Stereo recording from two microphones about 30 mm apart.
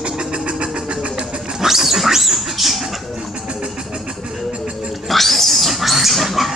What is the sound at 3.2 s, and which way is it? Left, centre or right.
Music, right.